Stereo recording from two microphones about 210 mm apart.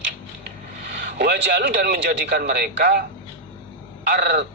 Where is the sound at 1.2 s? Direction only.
50° right (ahead or behind).